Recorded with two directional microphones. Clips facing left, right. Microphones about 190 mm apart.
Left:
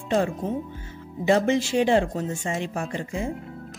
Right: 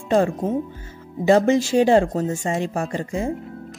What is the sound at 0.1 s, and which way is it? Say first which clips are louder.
A woman's voice: right 5 dB; 45° right (ahead or behind).